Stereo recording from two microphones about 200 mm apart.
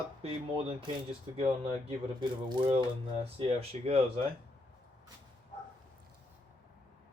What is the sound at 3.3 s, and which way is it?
Speech, 30° right (ahead or behind).